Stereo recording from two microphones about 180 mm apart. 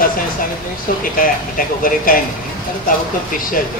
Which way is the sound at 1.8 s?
50° left (ahead or behind).